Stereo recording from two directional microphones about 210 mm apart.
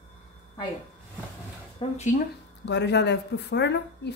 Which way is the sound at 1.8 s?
30° left (ahead or behind).